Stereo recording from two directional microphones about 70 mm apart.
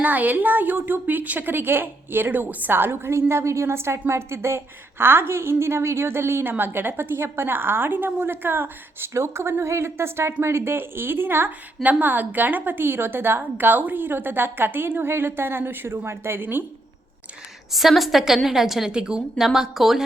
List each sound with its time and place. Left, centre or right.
0.0 s a woman's voice: right
9.1 s a woman's voice: right
17.7 s a woman's voice: centre